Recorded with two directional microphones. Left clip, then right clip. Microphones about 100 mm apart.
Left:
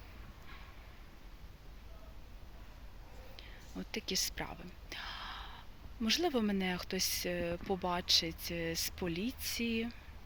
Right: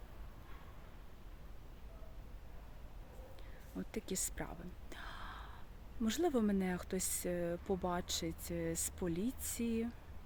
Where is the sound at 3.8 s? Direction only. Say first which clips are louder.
Left 6 dB; 30° right (ahead or behind).